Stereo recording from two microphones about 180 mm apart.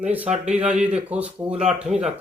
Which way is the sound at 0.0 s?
10° right (ahead or behind).